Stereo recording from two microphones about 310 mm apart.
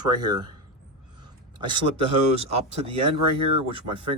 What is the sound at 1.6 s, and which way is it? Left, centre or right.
Speech, centre.